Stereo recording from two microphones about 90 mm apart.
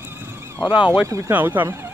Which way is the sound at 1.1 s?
35° right (ahead or behind).